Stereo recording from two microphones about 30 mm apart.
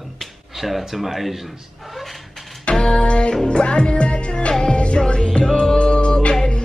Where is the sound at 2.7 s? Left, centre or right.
Left.